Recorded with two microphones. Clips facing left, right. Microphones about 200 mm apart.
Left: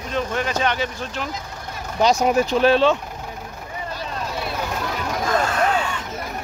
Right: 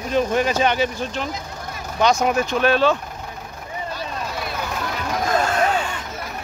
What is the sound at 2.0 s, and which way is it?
Speech, 35° left (ahead or behind).